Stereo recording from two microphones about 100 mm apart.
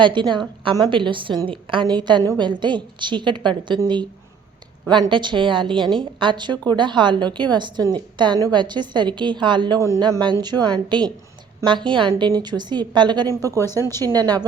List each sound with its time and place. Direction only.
0.0 s a woman's voice: 55° right (ahead or behind)
4.9 s a woman's voice: 50° right (ahead or behind)
10.5 s a woman's voice: 5° right (ahead or behind)
10.8 s a woman's voice: 50° right (ahead or behind)
13.4 s speech: 35° right (ahead or behind)